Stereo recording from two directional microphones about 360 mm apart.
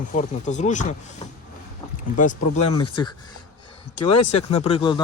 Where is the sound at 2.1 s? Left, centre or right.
Left.